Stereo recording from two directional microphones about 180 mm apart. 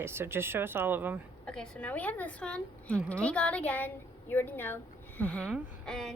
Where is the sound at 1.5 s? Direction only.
5° left (ahead or behind).